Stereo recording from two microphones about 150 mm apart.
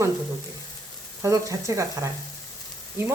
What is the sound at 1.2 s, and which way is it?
Speech, 20° right (ahead or behind).